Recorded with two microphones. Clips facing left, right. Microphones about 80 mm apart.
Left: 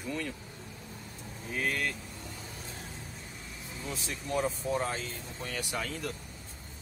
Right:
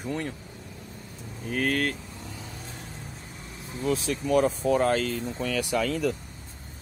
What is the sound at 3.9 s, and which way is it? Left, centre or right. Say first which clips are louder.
Speech: right 12 dB; right.